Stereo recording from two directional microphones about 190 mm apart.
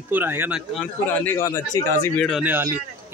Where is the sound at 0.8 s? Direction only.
10° left (ahead or behind).